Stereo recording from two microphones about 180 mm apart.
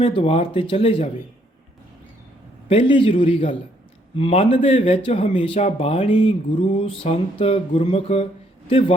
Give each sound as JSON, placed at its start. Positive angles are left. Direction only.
{"t": 0.0, "sound": "speech", "side_deg": 30}
{"t": 2.6, "sound": "speech", "side_deg": 30}